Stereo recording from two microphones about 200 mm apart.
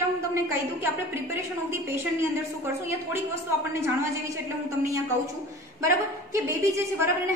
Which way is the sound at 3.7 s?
15° right (ahead or behind).